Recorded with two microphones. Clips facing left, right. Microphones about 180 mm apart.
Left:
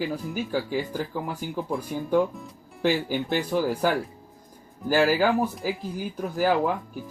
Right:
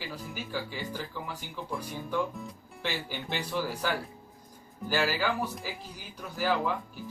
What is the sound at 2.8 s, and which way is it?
Speech, 45° left (ahead or behind).